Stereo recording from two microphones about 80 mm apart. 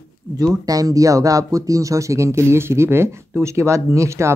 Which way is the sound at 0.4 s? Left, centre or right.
Right.